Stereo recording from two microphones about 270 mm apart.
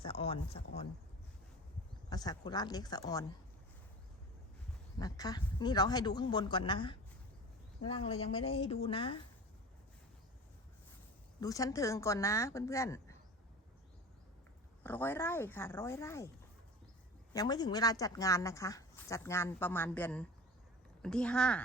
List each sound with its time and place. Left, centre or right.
0.0 s a sound: centre
2.0 s speech: centre
4.9 s speech: centre
11.3 s speech: centre
14.8 s speech: centre
17.3 s speech: centre